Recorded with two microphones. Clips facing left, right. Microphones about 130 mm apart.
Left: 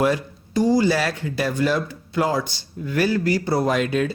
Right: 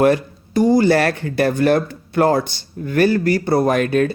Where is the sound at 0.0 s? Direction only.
55° right (ahead or behind).